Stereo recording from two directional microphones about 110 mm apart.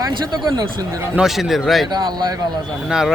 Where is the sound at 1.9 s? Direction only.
40° right (ahead or behind).